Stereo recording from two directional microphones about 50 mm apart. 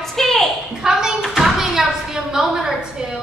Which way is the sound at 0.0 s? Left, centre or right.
Centre.